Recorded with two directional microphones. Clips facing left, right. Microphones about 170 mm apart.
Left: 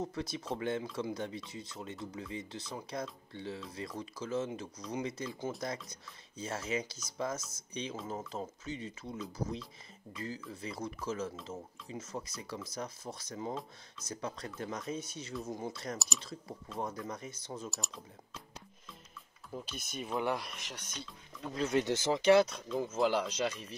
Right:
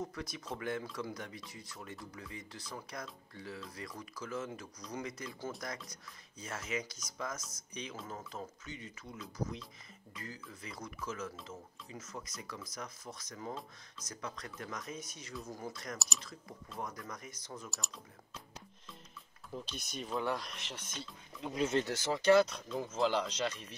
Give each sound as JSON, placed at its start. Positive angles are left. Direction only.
{"t": 0.0, "sound": "speech", "side_deg": 25}
{"t": 17.6, "sound": "speech", "side_deg": 0}
{"t": 19.5, "sound": "speech", "side_deg": 5}
{"t": 20.2, "sound": "speech", "side_deg": 10}
{"t": 21.7, "sound": "speech", "side_deg": 20}
{"t": 22.7, "sound": "speech", "side_deg": 0}